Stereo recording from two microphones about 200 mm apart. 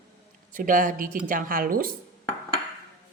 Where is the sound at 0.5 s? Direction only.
40° right (ahead or behind).